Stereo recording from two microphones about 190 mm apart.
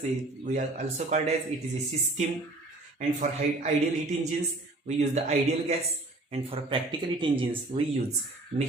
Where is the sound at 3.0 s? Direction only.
35° right (ahead or behind).